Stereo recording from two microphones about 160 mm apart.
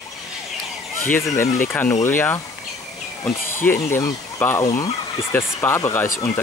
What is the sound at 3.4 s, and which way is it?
Speech, 15° left (ahead or behind).